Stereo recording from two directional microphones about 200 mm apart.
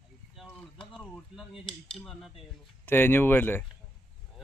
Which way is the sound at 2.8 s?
10° left (ahead or behind).